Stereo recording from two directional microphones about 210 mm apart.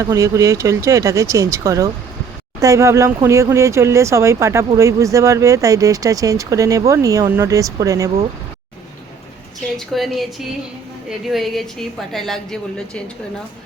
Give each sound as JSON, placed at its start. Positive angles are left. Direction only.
{"t": 0.0, "sound": "speech", "side_deg": -15}
{"t": 9.7, "sound": "a woman's voice", "side_deg": 0}
{"t": 11.3, "sound": "a woman's voice", "side_deg": 0}